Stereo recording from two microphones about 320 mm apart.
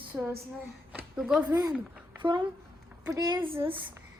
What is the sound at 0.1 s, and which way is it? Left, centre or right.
A woman's voice, centre.